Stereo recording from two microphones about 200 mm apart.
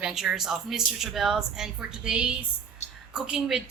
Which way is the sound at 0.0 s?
Centre (ahead or behind).